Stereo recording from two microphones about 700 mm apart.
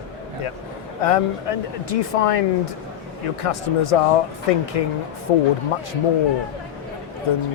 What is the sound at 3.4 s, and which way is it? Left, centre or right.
Speech, left.